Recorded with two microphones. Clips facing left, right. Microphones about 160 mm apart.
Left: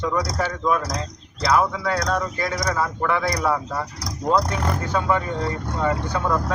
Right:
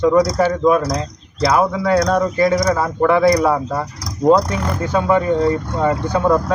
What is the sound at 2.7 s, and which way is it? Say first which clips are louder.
Speech: right 7 dB; 30° right (ahead or behind).